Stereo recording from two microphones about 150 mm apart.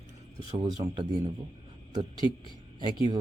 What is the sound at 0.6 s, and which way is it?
Speech, 30° right (ahead or behind).